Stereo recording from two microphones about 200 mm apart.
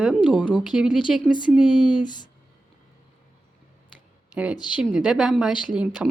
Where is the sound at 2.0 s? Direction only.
20° left (ahead or behind).